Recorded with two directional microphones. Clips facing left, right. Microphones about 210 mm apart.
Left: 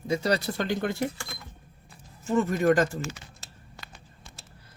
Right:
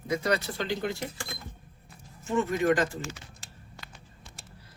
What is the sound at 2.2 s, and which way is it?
Speech, 40° left (ahead or behind).